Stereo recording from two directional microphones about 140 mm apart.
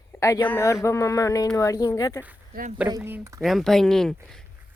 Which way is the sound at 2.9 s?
15° right (ahead or behind).